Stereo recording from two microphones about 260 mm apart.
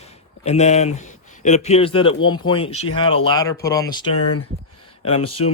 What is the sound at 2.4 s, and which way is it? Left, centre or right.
Speech, left.